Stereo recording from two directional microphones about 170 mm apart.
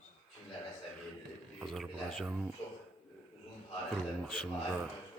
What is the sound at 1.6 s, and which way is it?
Speech, centre (ahead or behind).